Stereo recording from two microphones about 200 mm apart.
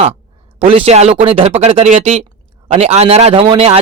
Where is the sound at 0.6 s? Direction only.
30° right (ahead or behind).